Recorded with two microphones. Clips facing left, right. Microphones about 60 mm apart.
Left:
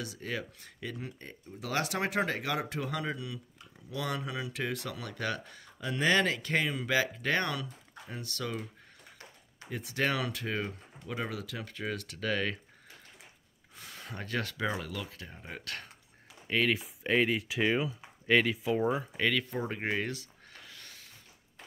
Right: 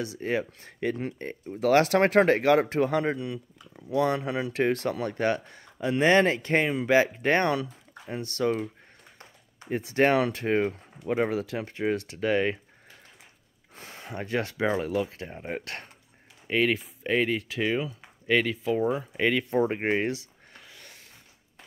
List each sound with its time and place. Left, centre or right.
0.0 s speech: right
9.7 s speech: right
13.7 s speech: right
16.4 s speech: centre
16.7 s speech: centre
19.1 s speech: right
20.6 s a sound: centre